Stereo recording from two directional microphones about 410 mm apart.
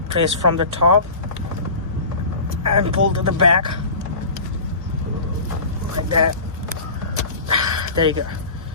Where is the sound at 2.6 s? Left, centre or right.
Right.